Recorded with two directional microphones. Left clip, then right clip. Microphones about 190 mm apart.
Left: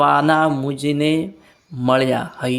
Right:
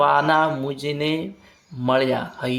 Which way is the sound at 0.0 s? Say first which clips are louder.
Left 2 dB; 40° left (ahead or behind).